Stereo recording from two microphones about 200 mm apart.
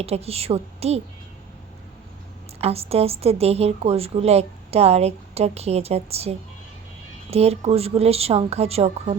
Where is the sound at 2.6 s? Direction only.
30° right (ahead or behind).